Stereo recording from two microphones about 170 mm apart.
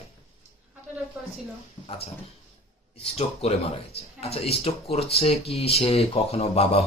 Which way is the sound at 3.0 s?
40° left (ahead or behind).